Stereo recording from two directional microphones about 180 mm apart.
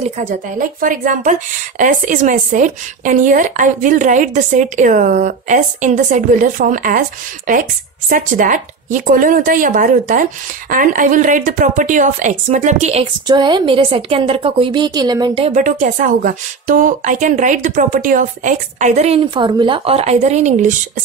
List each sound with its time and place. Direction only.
0.0 s a woman's voice: 45° right (ahead or behind)
13.3 s a woman's voice: 25° right (ahead or behind)
15.4 s a woman's voice: 45° right (ahead or behind)